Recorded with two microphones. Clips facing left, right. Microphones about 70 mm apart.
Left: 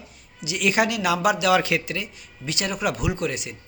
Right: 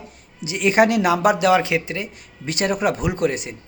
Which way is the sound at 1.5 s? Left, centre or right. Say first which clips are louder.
Right 2 dB; right.